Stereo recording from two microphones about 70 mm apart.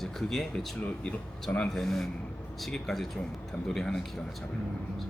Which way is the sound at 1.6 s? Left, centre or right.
Centre.